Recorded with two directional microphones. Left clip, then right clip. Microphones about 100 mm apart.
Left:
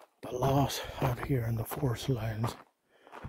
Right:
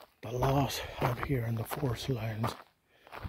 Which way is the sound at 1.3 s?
35° left (ahead or behind).